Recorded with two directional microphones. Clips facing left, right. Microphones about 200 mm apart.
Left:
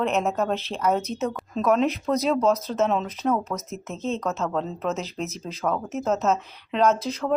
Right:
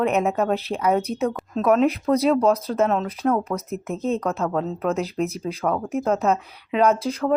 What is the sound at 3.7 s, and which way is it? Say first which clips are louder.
Speech: right 6 dB; 55° right (ahead or behind).